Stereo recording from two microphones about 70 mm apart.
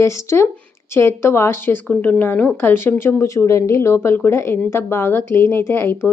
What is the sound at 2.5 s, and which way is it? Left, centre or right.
Speech, left.